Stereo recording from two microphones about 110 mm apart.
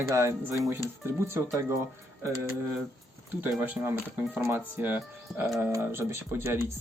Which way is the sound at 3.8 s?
20° right (ahead or behind).